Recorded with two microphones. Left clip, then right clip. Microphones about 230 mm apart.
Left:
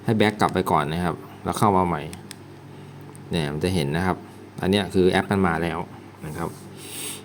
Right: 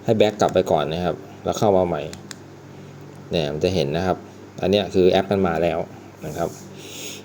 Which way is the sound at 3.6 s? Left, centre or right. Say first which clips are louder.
Right 3 dB; left.